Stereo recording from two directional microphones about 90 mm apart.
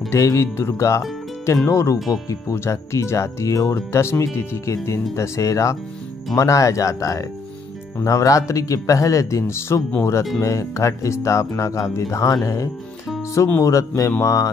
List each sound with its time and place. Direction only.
0.1 s speech: 35° left (ahead or behind)